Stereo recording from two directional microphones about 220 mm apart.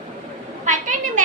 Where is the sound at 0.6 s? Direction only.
35° right (ahead or behind).